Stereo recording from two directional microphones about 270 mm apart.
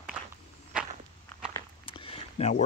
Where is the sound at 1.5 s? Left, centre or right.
Centre.